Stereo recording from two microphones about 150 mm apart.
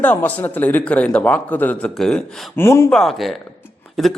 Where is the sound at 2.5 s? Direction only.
15° left (ahead or behind).